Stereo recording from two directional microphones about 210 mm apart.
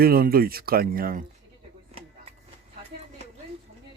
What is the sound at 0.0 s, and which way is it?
Speech, 45° right (ahead or behind).